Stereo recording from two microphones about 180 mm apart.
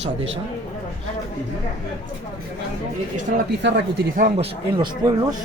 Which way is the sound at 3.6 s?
75° right (ahead or behind).